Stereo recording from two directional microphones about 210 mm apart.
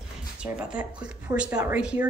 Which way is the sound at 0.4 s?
5° right (ahead or behind).